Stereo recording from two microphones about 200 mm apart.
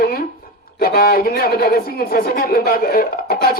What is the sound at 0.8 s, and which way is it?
Speech, 50° left (ahead or behind).